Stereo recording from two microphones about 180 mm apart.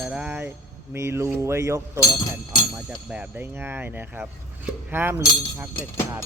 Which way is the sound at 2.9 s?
5° right (ahead or behind).